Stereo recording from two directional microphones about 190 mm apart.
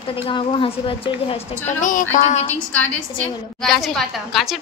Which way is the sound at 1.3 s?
45° left (ahead or behind).